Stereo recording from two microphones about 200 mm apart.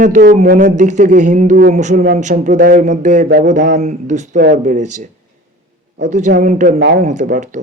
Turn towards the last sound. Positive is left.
turn(degrees=-40)  # may be behind; listen again after turning